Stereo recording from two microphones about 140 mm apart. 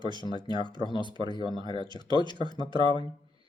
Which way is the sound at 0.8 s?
35° left (ahead or behind).